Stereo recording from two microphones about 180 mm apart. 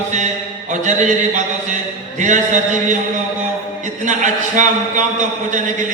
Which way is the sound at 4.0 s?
45° right (ahead or behind).